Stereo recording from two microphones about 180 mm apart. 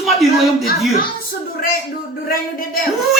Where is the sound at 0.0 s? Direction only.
Centre (ahead or behind).